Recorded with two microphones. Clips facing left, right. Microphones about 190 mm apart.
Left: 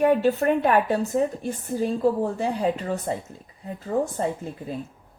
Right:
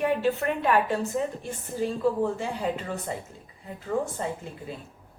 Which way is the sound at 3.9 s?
35° left (ahead or behind).